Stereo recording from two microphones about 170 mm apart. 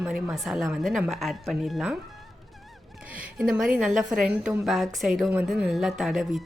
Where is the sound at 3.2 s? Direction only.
5° right (ahead or behind).